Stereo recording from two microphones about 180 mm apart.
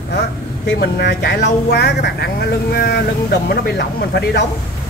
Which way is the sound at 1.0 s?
65° left (ahead or behind).